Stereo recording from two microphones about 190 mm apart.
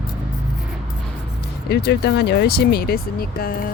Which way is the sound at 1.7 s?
60° left (ahead or behind).